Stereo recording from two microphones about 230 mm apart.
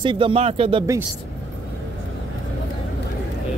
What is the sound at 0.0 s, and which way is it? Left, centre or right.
Speech, right.